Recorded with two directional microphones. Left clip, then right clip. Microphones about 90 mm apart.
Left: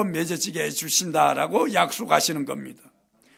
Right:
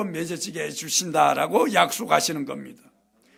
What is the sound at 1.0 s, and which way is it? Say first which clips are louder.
A man's voice: right 1 dB; 5° left (ahead or behind).